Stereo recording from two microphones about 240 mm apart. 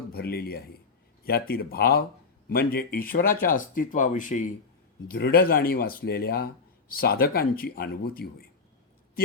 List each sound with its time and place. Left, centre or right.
0.1 s speech: left